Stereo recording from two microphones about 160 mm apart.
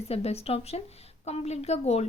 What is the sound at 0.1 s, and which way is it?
Speech, 40° left (ahead or behind).